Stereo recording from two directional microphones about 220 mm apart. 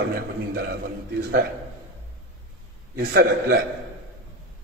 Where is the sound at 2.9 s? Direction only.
45° right (ahead or behind).